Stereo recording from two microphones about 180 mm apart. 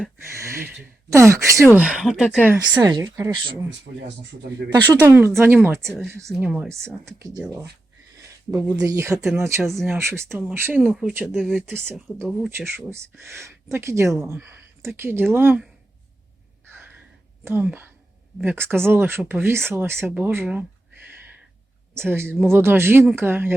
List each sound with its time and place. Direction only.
0.2 s speech: 15° right (ahead or behind)
1.7 s speech: 5° right (ahead or behind)
2.6 s speech: 20° right (ahead or behind)
4.7 s speech: 20° right (ahead or behind)
8.4 s speech: 15° right (ahead or behind)
9.1 s speech: 5° right (ahead or behind)
9.4 s speech: 15° right (ahead or behind)
17.4 s speech: 10° right (ahead or behind)
21.9 s speech: 15° right (ahead or behind)